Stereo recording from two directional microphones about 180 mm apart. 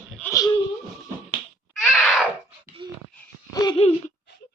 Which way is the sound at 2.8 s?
25° right (ahead or behind).